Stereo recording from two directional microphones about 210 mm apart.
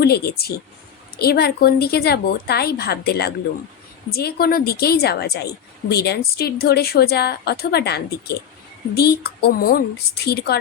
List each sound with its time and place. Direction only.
0.0 s a woman's voice: 50° left (ahead or behind)